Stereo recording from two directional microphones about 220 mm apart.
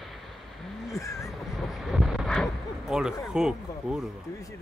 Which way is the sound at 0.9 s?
15° left (ahead or behind).